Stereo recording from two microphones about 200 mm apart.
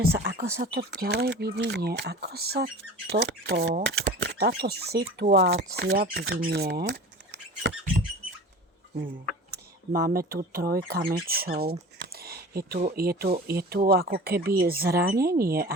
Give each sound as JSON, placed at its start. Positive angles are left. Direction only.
{"t": 0.3, "sound": "speech", "side_deg": -45}
{"t": 9.9, "sound": "speech", "side_deg": -50}